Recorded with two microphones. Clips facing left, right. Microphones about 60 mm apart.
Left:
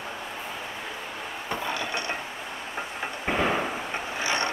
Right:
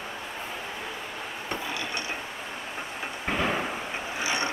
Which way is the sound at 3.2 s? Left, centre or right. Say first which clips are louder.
Left 2 dB; centre.